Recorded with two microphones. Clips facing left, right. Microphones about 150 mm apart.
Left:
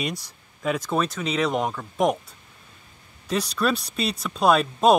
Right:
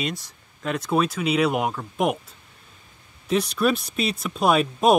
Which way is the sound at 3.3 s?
5° right (ahead or behind).